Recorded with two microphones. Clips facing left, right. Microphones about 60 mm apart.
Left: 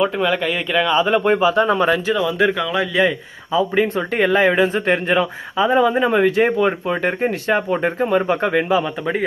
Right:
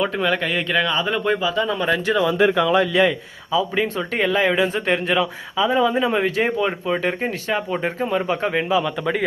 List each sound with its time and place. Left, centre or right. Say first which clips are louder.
0.0 s speech: left 3 dB; centre
0.9 s speech: left 5 dB; left
2.1 s speech: right 1 dB; centre
3.5 s speech: left 3 dB; left
8.7 s speech: left 1 dB; left